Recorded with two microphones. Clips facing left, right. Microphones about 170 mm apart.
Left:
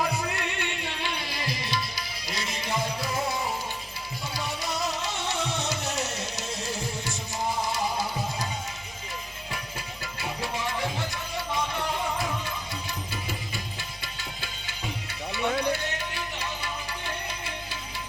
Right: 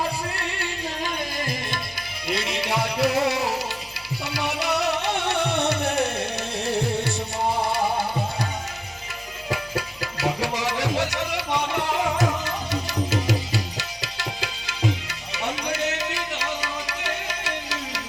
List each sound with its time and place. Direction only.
0.3 s music: 35° right (ahead or behind)
2.2 s music: 65° right (ahead or behind)
9.5 s music: 85° right